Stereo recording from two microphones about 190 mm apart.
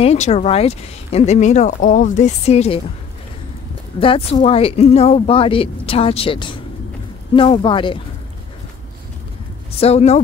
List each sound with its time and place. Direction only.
0.0 s speech: 35° left (ahead or behind)
4.0 s speech: 30° left (ahead or behind)
9.8 s speech: 35° left (ahead or behind)